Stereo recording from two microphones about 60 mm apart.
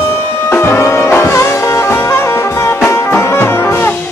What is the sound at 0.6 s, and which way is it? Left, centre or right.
Music, left.